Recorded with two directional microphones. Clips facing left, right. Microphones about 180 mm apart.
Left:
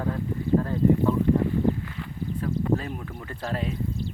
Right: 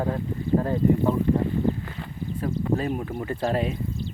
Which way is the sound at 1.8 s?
35° right (ahead or behind).